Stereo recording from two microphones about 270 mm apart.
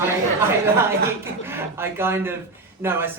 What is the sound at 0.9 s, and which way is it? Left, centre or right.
Speech, centre.